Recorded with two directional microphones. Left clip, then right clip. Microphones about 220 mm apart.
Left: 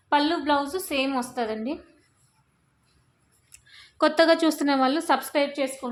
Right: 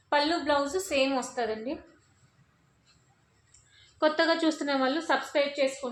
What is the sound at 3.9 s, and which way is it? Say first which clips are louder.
Speech: left 6 dB; 55° left (ahead or behind).